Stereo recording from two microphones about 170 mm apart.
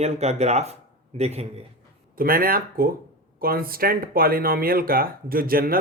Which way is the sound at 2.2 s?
60° right (ahead or behind).